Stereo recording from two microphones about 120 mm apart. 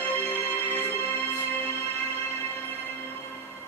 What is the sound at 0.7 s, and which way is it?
Music, 15° left (ahead or behind).